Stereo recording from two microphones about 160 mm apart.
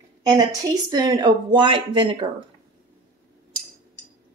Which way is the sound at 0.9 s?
25° right (ahead or behind).